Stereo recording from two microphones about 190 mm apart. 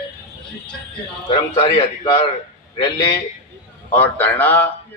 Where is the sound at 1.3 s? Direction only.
25° left (ahead or behind).